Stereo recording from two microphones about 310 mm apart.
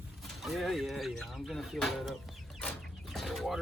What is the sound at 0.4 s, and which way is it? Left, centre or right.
Speech, centre.